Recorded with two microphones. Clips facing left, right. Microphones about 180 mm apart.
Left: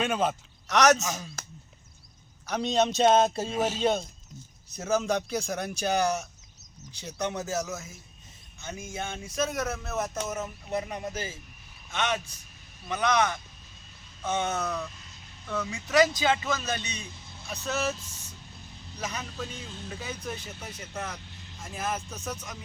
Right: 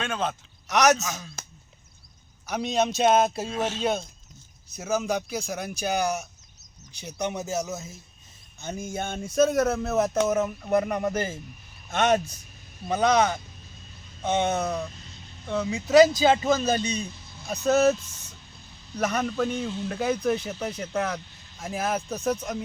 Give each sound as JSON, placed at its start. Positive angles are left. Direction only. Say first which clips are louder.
{"t": 0.0, "sound": "a man's voice", "louder": "left 2 dB", "side_deg": 10}
{"t": 0.7, "sound": "speech", "louder": "right 1 dB", "side_deg": -10}
{"t": 0.9, "sound": "a man's voice", "louder": "even", "side_deg": 10}
{"t": 2.5, "sound": "speech", "louder": "even", "side_deg": -5}
{"t": 8.5, "sound": "a sound", "louder": "right 5 dB", "side_deg": -40}
{"t": 11.9, "sound": "a man's voice", "louder": "right 8 dB", "side_deg": -45}
{"t": 12.9, "sound": "speech", "louder": "right 4 dB", "side_deg": -30}
{"t": 14.2, "sound": "a sound", "louder": "right 5 dB", "side_deg": -30}
{"t": 14.5, "sound": "speech", "louder": "right 4 dB", "side_deg": -30}
{"t": 18.9, "sound": "a sound", "louder": "right 11 dB", "side_deg": -60}